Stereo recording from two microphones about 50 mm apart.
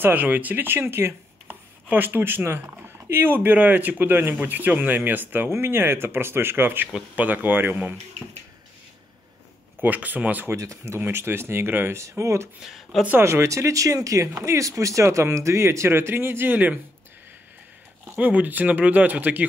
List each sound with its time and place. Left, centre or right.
0.0 s speech: right
0.7 s speech: right
5.5 s speech: right
9.8 s speech: right
10.5 s speech: right
11.0 s speech: right
12.0 s speech: right
12.6 s speech: centre
13.2 s speech: right
16.5 s speech: right
18.0 s speech: right